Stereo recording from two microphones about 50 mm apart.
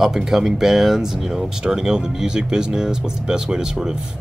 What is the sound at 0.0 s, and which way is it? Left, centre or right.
Speech, centre.